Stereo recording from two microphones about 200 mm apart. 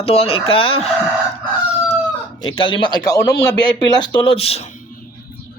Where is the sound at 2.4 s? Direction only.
25° left (ahead or behind).